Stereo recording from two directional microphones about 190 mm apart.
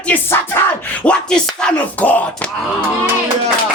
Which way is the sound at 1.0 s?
5° left (ahead or behind).